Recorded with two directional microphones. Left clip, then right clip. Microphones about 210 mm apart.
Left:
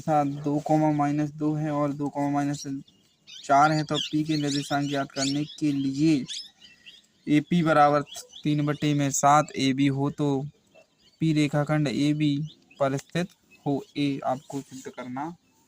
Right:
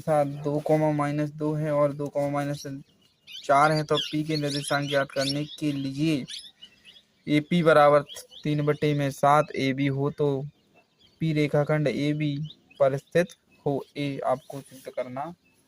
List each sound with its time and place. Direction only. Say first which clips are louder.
0.0 s speech: even; 20° right (ahead or behind)
7.3 s speech: right 2 dB; 25° right (ahead or behind)